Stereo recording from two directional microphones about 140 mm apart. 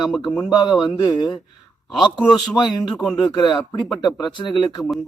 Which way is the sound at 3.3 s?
30° left (ahead or behind).